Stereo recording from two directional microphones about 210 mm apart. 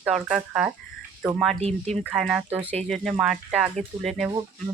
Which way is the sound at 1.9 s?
Centre (ahead or behind).